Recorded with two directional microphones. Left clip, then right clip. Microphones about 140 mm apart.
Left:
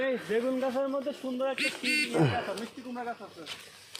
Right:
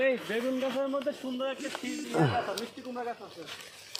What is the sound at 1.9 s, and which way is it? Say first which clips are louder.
Speech: even; 15° left (ahead or behind).